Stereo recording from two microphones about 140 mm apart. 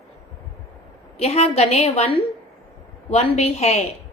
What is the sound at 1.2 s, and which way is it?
A woman's voice, 45° left (ahead or behind).